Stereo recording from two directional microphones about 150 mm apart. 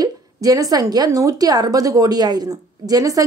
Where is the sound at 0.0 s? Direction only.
25° right (ahead or behind).